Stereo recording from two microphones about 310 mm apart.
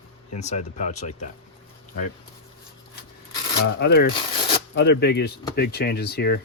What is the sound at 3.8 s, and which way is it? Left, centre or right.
Speech, left.